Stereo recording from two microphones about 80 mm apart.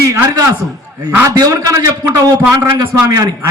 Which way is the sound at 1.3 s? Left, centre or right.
Right.